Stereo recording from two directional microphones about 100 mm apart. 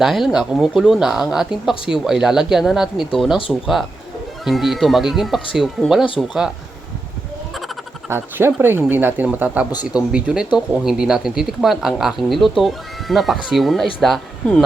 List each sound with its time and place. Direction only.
0.0 s speech: centre (ahead or behind)
8.1 s speech: 20° right (ahead or behind); by 14.6 s 5° left (ahead or behind)